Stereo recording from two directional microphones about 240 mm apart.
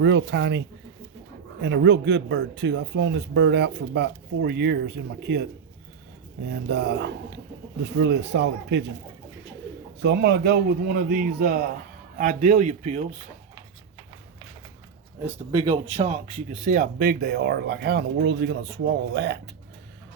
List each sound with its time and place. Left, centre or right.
0.0 s speech: right
1.6 s speech: right
6.5 s speech: right
10.0 s a man's voice: right
15.3 s speech: right